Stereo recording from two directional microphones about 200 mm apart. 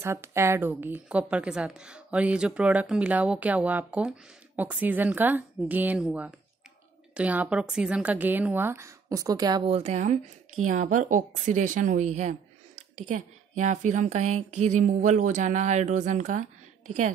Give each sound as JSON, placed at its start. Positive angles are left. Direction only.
{"t": 0.0, "sound": "a woman's voice", "side_deg": -15}
{"t": 9.7, "sound": "a woman's voice", "side_deg": -35}